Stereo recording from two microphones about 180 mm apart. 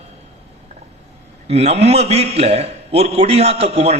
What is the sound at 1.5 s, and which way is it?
A man's voice, 35° right (ahead or behind).